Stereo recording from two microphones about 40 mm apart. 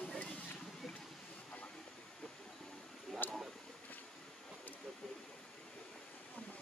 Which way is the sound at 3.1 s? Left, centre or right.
Centre.